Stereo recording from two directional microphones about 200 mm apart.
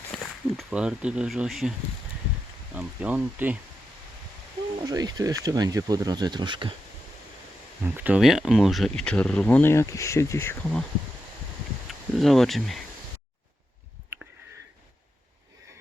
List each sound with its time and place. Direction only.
0.1 s speech: centre (ahead or behind)
2.7 s speech: 5° right (ahead or behind)
4.8 s speech: 20° right (ahead or behind)
7.9 s speech: 5° right (ahead or behind); by 10.8 s 10° left (ahead or behind)
11.9 s speech: centre (ahead or behind)